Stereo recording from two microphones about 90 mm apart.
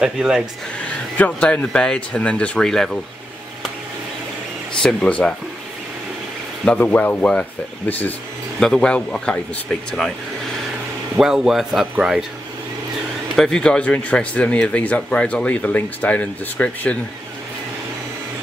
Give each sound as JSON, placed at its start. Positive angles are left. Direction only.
{"t": 0.0, "sound": "speech", "side_deg": -10}
{"t": 1.1, "sound": "speech", "side_deg": 15}
{"t": 4.8, "sound": "speech", "side_deg": 10}
{"t": 6.6, "sound": "speech", "side_deg": 15}
{"t": 8.5, "sound": "speech", "side_deg": 5}
{"t": 11.1, "sound": "speech", "side_deg": -5}
{"t": 13.4, "sound": "speech", "side_deg": 10}